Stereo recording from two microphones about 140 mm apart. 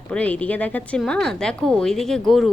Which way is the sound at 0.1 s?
10° left (ahead or behind).